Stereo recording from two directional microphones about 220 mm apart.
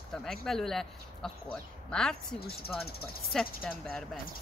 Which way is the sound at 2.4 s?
45° left (ahead or behind).